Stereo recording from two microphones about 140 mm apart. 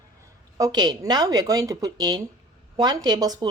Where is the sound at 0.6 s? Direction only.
30° right (ahead or behind).